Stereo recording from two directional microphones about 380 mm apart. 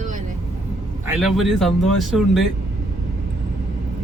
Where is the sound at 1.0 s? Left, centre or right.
Centre.